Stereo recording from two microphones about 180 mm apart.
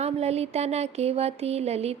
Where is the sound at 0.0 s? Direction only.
35° right (ahead or behind).